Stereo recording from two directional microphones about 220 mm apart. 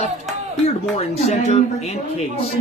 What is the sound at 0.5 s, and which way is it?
Speech, 30° left (ahead or behind).